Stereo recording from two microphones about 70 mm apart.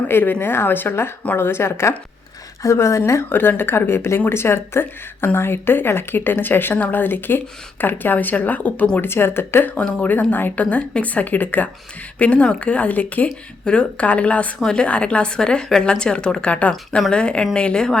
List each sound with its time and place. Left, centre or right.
0.1 s a woman's voice: left; by 17.9 s centre